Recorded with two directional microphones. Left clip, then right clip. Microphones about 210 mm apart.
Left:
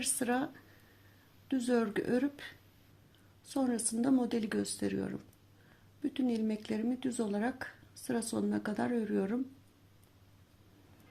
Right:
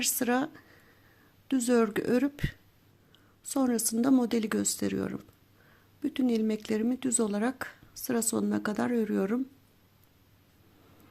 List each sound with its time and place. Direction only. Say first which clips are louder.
0.0 s speech: right 5 dB; 30° right (ahead or behind)